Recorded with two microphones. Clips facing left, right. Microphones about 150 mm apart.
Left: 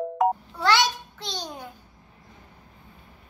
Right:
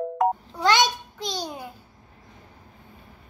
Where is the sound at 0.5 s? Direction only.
20° right (ahead or behind).